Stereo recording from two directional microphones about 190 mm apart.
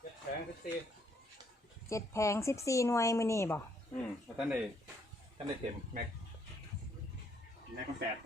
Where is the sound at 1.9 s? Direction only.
15° left (ahead or behind).